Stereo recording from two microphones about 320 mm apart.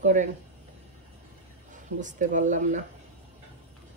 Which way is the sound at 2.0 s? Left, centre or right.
Right.